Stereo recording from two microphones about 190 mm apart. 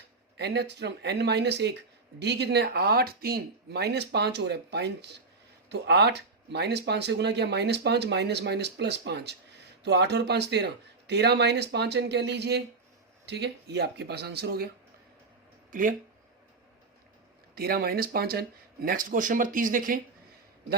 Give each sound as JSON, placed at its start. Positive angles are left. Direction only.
{"t": 0.3, "sound": "speech", "side_deg": -60}
{"t": 15.7, "sound": "speech", "side_deg": -45}
{"t": 17.5, "sound": "speech", "side_deg": -50}